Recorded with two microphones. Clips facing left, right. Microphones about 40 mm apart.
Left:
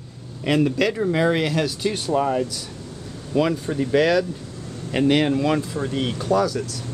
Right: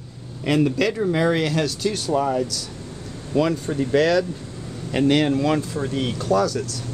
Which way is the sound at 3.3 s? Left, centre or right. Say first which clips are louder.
Even; centre.